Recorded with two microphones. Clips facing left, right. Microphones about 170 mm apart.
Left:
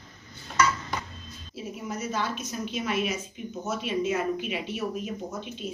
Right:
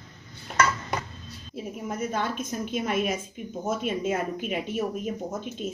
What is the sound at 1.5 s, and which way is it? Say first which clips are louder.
A woman's voice: right 2 dB; 50° right (ahead or behind).